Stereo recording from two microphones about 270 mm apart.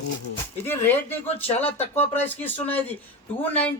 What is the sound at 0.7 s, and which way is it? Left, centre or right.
Speech, centre.